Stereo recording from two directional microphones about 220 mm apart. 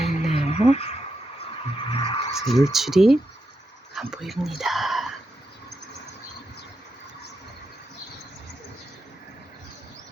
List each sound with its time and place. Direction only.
0.0 s a sound: 30° left (ahead or behind)
1.8 s vehicle: 25° left (ahead or behind)
2.3 s speech: centre (ahead or behind)